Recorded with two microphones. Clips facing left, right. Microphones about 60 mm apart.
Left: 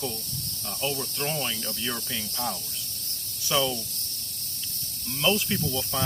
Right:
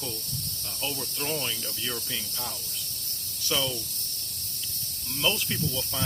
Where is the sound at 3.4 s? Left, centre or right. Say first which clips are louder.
Left 4 dB; centre.